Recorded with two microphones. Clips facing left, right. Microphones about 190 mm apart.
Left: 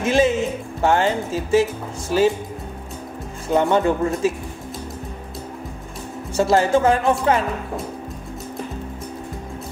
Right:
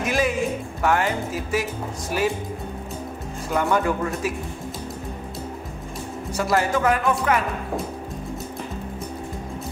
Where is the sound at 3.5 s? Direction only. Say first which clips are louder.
Left 4 dB; 25° left (ahead or behind).